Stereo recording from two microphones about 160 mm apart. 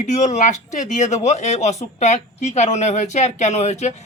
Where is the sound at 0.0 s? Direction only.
50° left (ahead or behind).